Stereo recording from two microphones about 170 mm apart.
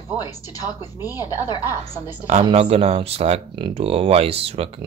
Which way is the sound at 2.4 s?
35° right (ahead or behind).